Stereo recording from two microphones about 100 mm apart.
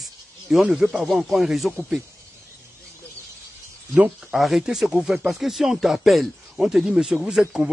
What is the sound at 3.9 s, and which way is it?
Speech, 15° right (ahead or behind).